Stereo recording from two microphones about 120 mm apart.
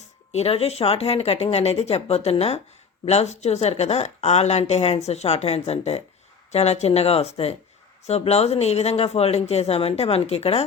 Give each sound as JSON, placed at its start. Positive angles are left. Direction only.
{"t": 0.0, "sound": "speech", "side_deg": 60}